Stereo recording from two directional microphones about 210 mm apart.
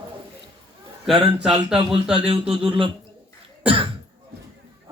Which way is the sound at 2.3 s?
25° right (ahead or behind).